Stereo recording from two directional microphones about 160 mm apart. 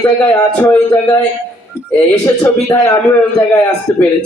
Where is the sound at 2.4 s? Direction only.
20° left (ahead or behind).